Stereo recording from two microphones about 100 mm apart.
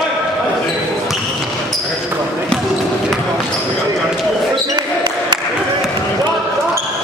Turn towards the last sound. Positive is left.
turn(degrees=-50)  # may be behind; listen again after turning